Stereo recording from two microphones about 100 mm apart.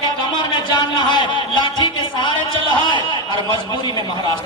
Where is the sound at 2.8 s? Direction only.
50° left (ahead or behind).